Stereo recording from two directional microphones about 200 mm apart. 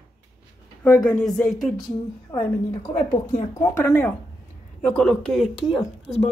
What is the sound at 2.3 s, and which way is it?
A woman's voice, 25° left (ahead or behind).